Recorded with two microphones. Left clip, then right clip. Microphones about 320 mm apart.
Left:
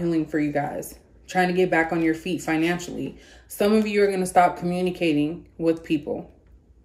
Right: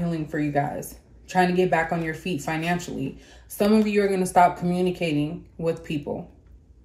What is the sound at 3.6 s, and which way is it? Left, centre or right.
Speech, right.